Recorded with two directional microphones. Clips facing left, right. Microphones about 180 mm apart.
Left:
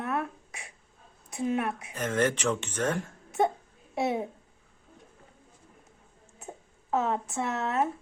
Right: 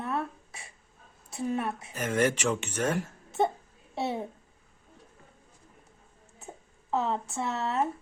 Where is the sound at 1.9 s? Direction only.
10° right (ahead or behind).